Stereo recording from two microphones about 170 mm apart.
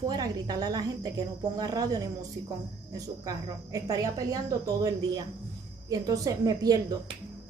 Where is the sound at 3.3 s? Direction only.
20° right (ahead or behind).